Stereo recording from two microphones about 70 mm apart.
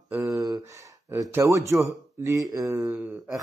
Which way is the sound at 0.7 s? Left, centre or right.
Right.